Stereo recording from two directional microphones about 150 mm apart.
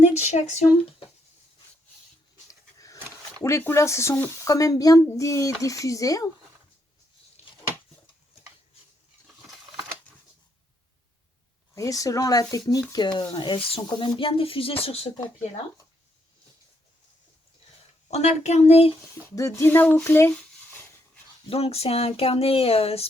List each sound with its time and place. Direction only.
0.0 s speech: 50° left (ahead or behind)
2.5 s a sound: 20° left (ahead or behind)
3.4 s speech: 15° left (ahead or behind)
11.7 s speech: 20° left (ahead or behind); by 15.1 s 40° left (ahead or behind)
18.1 s speech: 50° left (ahead or behind)
19.4 s speech: 20° left (ahead or behind)
21.5 s speech: 40° left (ahead or behind)